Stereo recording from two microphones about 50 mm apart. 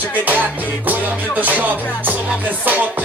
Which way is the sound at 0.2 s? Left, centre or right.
Right.